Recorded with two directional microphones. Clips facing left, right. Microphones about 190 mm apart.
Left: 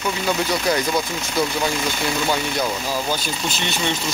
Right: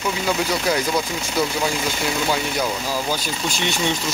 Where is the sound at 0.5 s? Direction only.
10° right (ahead or behind).